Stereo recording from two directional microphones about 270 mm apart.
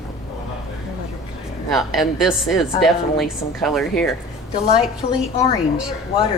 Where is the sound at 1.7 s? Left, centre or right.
Centre.